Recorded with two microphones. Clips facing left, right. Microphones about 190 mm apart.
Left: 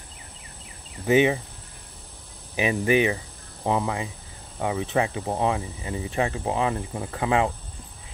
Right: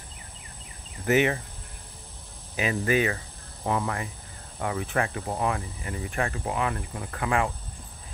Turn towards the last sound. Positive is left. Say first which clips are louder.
# left 4 dB
turn(degrees=25)  # may be behind; listen again after turning